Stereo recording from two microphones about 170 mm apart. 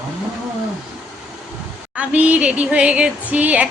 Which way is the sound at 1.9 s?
10° right (ahead or behind).